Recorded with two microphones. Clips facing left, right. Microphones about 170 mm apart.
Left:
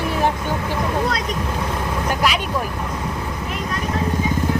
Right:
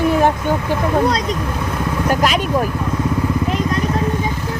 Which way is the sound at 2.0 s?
45° right (ahead or behind).